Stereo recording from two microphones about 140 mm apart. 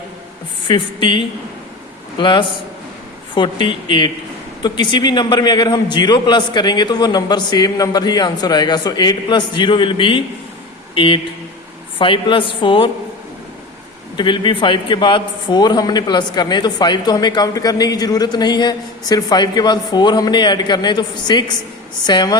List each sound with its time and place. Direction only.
0.7 s a man's voice: 35° left (ahead or behind)
14.2 s a man's voice: 35° left (ahead or behind)